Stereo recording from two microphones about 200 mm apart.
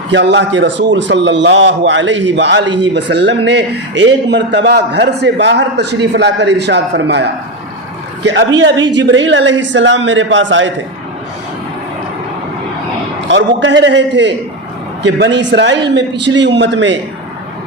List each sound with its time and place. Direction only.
0.1 s a man's voice: 65° right (ahead or behind)
13.2 s a man's voice: 65° right (ahead or behind)